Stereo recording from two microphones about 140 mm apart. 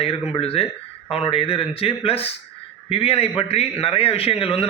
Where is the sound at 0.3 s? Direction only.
45° left (ahead or behind).